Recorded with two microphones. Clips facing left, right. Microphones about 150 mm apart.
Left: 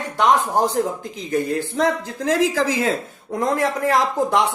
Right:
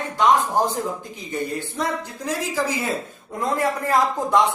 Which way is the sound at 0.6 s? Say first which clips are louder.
Left 4 dB; 85° left.